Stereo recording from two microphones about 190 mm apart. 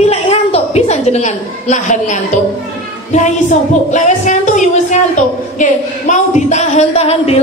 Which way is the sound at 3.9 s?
40° left (ahead or behind).